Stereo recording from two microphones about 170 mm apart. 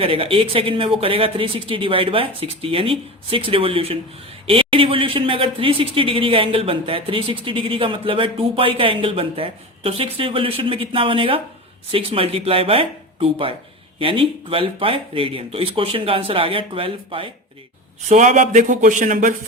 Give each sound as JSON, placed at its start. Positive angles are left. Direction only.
{"t": 0.0, "sound": "speech", "side_deg": -35}
{"t": 18.1, "sound": "speech", "side_deg": -45}